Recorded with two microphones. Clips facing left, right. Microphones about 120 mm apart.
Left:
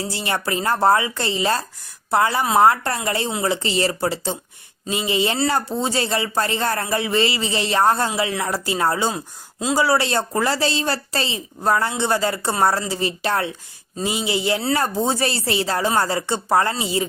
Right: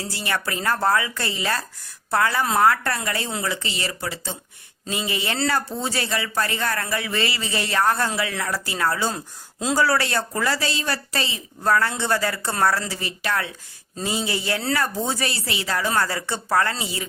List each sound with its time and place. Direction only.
0.0 s a woman's voice: 25° left (ahead or behind)
14.0 s a woman's voice: 20° left (ahead or behind)